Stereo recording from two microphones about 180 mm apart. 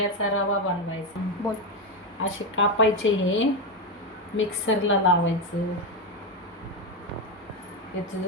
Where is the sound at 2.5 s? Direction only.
90° left.